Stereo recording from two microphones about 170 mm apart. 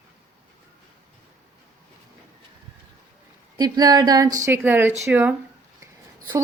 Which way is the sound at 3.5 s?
25° right (ahead or behind).